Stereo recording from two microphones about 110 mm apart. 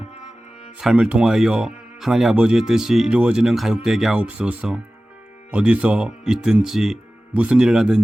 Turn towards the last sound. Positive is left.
turn(degrees=-5)  # may be behind; listen again after turning